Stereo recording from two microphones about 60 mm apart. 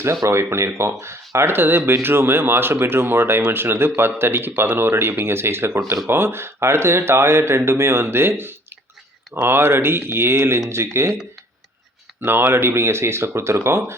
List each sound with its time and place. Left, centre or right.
0.3 s speech: right
12.2 s speech: right